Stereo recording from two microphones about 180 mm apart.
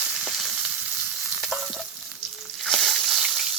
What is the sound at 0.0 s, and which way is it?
Frying, 5° right (ahead or behind).